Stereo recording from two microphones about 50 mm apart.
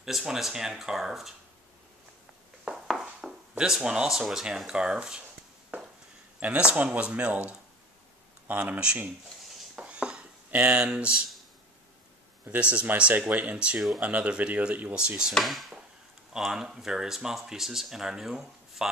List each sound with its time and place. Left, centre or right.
0.0 s speech: centre
2.6 s a sound: centre
3.5 s speech: centre
4.2 s speech: centre
5.7 s a sound: right
6.6 s speech: right
8.7 s speech: right
9.8 s a sound: centre
10.5 s speech: right
12.4 s speech: right
15.0 s speech: centre
15.3 s speech: centre
16.3 s speech: centre